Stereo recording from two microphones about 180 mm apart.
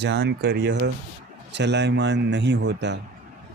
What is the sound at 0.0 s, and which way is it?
Speech, 70° right (ahead or behind).